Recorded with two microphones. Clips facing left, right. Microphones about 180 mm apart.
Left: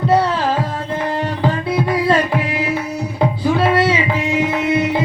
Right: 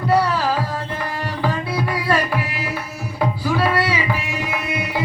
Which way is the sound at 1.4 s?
25° left (ahead or behind).